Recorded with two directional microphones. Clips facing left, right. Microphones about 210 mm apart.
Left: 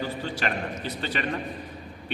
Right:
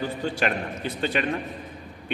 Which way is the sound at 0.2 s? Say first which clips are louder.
Right 3 dB; 50° right (ahead or behind).